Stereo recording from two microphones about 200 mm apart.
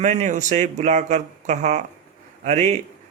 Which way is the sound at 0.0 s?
35° right (ahead or behind).